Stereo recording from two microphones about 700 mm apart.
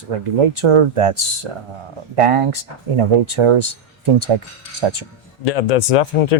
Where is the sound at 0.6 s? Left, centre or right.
Right.